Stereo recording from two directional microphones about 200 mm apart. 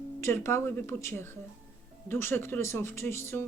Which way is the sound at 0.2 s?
15° left (ahead or behind).